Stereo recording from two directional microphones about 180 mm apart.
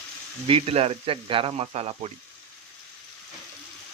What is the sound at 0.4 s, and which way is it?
Speech, 35° right (ahead or behind).